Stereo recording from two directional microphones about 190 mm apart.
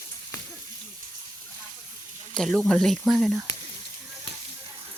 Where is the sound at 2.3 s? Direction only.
5° left (ahead or behind).